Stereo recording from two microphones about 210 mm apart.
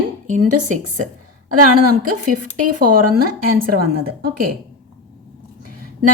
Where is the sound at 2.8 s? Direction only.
45° right (ahead or behind).